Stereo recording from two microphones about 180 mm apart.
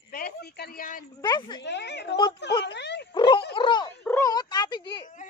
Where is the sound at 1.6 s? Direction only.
70° left (ahead or behind).